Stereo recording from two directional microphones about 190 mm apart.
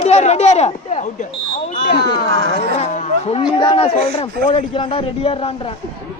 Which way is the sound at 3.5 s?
25° left (ahead or behind).